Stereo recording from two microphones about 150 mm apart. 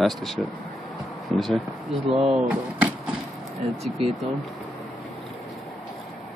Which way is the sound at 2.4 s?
10° right (ahead or behind).